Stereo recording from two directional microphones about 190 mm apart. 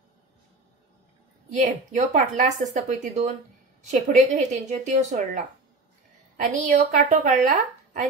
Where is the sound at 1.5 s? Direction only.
40° right (ahead or behind).